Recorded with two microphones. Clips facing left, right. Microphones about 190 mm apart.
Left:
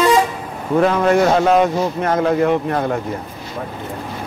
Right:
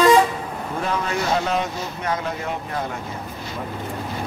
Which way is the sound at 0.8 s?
60° left (ahead or behind).